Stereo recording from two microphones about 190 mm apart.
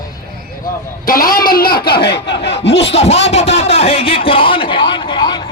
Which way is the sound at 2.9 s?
35° left (ahead or behind).